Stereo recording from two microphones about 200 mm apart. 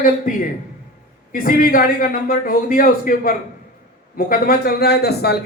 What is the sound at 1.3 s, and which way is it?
A man's voice, 45° left (ahead or behind).